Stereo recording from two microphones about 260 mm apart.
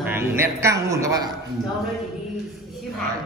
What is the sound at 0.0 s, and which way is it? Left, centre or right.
A man's voice, centre.